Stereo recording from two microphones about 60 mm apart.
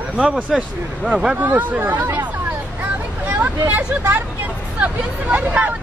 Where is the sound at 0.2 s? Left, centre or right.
Centre.